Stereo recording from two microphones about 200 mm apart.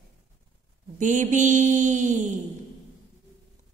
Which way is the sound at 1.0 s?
40° right (ahead or behind).